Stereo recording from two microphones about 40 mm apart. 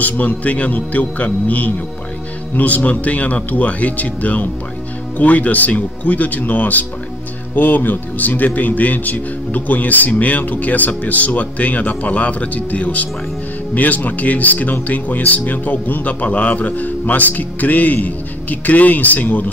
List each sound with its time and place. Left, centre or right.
0.0 s speech: left